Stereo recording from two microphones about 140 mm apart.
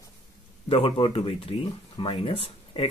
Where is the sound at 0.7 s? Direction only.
40° left (ahead or behind).